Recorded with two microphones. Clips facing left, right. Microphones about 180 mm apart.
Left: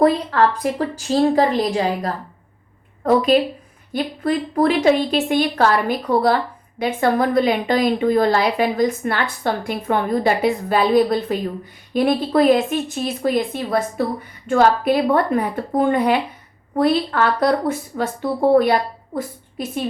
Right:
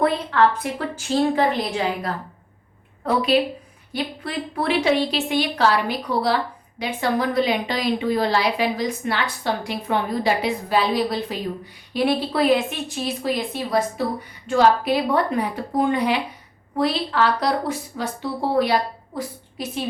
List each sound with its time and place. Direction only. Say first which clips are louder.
0.0 s a woman's voice: left 3 dB; 40° left (ahead or behind)